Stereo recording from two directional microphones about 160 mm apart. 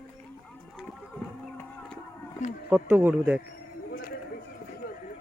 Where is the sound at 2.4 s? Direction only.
45° left (ahead or behind).